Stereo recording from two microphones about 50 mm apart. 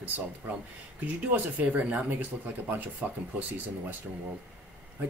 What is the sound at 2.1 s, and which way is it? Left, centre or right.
Speech, right.